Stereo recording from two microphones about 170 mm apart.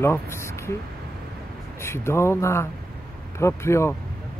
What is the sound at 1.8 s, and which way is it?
Speech, 15° left (ahead or behind).